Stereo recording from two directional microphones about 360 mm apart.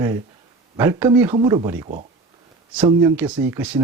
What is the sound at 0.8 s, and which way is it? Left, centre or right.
Speech, centre.